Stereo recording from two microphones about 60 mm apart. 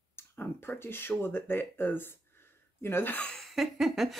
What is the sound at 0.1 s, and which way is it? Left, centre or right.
Speech, left.